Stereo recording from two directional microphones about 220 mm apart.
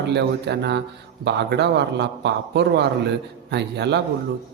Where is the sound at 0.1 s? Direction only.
50° right (ahead or behind).